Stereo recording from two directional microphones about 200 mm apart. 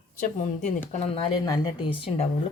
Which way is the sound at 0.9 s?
25° left (ahead or behind).